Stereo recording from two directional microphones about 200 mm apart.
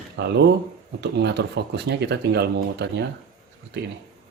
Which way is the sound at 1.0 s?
60° right (ahead or behind).